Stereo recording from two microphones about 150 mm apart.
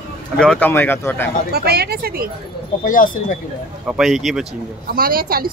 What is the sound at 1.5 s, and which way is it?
Speech, 90° right.